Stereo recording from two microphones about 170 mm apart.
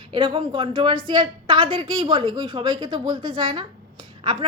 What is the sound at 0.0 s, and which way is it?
A woman's voice, 30° right (ahead or behind).